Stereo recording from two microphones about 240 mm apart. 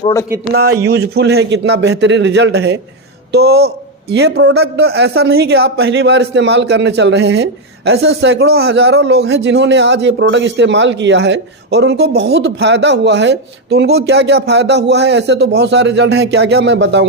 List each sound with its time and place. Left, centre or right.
0.0 s a man's voice: centre
0.5 s speech: right